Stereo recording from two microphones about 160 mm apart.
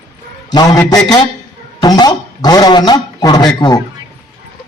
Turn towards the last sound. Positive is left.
turn(degrees=25)  # may be behind; listen again after turning